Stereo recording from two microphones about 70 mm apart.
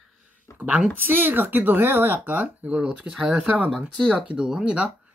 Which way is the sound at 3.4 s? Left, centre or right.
Right.